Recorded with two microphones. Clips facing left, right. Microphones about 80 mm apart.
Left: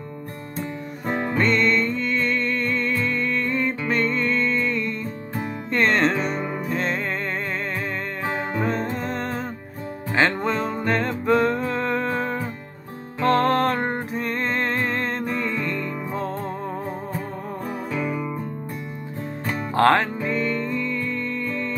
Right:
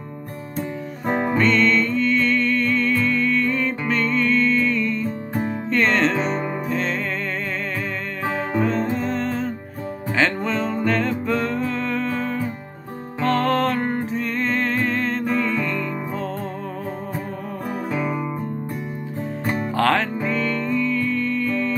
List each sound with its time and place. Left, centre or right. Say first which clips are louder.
0.6 s music: right 3 dB; right
1.4 s music: right 1 dB; centre
8.3 s music: right 3 dB; centre
17.6 s music: right 3 dB; centre
19.7 s music: left 3 dB; left